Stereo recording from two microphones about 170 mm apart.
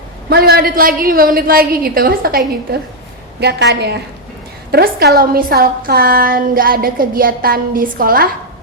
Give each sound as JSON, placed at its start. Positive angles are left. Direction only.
{"t": 0.3, "sound": "a woman's voice", "side_deg": -65}
{"t": 3.4, "sound": "a woman's voice", "side_deg": -75}
{"t": 4.7, "sound": "a woman's voice", "side_deg": -65}